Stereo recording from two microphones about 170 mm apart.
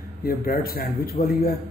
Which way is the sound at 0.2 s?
60° left (ahead or behind).